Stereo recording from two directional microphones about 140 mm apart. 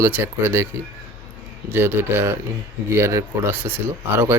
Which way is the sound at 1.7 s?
15° right (ahead or behind).